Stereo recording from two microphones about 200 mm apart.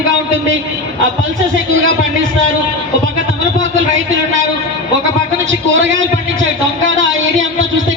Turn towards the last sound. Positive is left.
turn(degrees=-70)  # may be behind; listen again after turning